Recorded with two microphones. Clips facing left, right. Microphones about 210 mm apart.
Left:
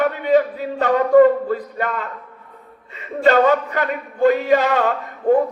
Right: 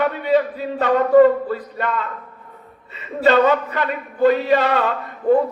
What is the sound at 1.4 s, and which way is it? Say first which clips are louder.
Speech: left 1 dB; 45° left (ahead or behind).